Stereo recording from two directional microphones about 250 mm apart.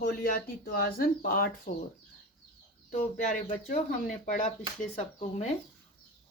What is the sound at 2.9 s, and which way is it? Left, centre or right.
Speech, left.